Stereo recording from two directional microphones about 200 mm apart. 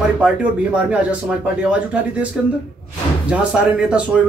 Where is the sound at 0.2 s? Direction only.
5° right (ahead or behind).